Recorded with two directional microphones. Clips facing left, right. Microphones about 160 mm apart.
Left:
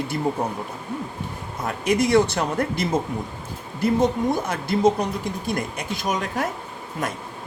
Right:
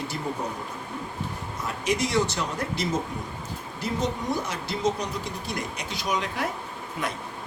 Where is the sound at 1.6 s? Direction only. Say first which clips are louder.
Left 6 dB; 55° left (ahead or behind).